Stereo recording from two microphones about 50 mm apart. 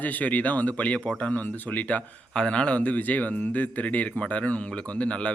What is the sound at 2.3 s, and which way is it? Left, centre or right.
Speech, centre.